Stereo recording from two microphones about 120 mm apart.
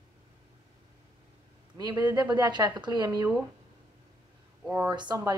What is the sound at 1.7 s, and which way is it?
Speech, 30° right (ahead or behind).